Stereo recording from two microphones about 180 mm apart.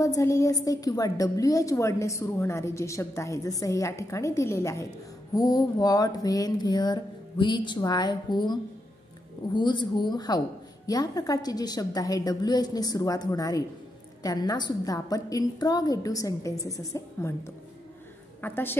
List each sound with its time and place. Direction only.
0.0 s a woman's voice: 15° left (ahead or behind)
5.3 s a sound: 20° left (ahead or behind)
18.4 s a woman's voice: 10° left (ahead or behind)